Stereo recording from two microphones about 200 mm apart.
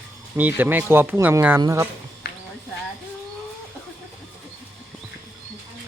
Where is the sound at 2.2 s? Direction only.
50° left (ahead or behind).